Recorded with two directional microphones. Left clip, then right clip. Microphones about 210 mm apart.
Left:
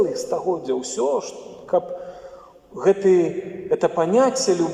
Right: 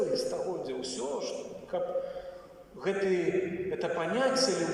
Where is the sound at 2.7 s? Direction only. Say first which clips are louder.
Left 13 dB; 50° left (ahead or behind).